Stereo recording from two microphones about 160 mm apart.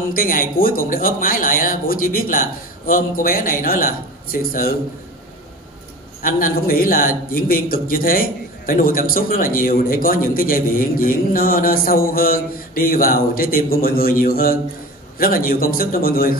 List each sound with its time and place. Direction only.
0.1 s a man's voice: 60° left (ahead or behind)
6.2 s a man's voice: 60° left (ahead or behind)